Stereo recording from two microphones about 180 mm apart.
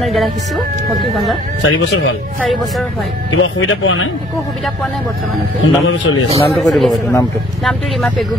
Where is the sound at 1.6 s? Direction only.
80° left.